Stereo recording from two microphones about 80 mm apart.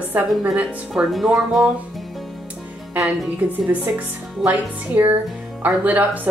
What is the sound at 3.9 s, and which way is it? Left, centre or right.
Speech, right.